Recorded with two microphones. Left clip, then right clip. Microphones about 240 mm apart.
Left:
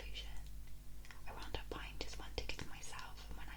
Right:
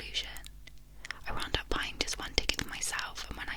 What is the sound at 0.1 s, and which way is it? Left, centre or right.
Whispering, right.